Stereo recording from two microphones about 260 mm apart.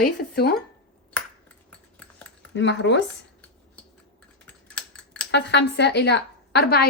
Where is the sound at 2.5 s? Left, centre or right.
Left.